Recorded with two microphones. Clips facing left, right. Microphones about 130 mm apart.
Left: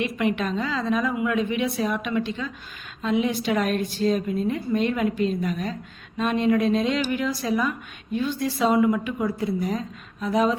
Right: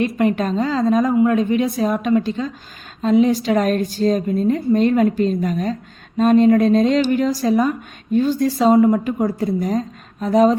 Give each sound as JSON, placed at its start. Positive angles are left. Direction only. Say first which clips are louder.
{"t": 0.0, "sound": "a woman's voice", "louder": "right 6 dB", "side_deg": -40}